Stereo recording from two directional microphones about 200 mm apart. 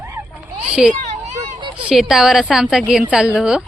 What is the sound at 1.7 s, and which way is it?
A woman's voice, 5° right (ahead or behind).